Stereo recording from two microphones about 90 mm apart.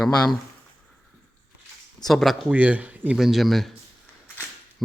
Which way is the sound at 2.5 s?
15° right (ahead or behind).